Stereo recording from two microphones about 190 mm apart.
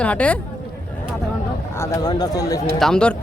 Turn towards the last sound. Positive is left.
turn(degrees=5)  # may be behind; listen again after turning